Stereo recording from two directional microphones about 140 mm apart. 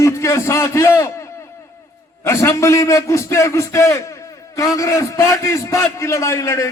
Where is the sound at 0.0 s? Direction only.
20° left (ahead or behind).